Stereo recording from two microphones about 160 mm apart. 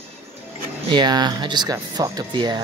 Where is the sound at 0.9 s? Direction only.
25° right (ahead or behind).